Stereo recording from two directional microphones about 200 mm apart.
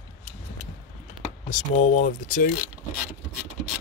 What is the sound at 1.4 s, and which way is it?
Speech, 40° left (ahead or behind).